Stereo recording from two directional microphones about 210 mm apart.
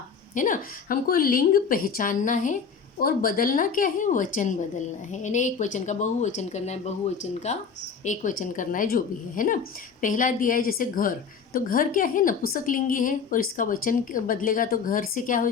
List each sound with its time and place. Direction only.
0.3 s a woman's voice: 40° left (ahead or behind)